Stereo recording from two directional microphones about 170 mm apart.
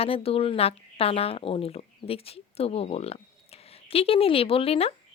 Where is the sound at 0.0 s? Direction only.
35° left (ahead or behind).